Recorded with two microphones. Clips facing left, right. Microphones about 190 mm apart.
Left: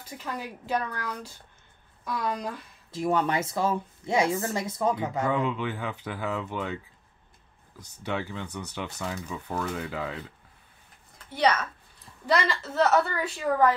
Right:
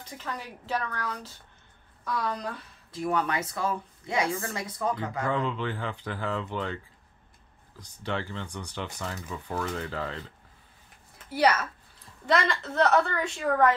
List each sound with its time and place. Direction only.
0.0 s speech: 10° left (ahead or behind)
2.9 s speech: 25° left (ahead or behind)
5.2 s speech: 10° left (ahead or behind)
8.0 s a woman's voice: 10° left (ahead or behind)
11.2 s a woman's voice: 5° right (ahead or behind)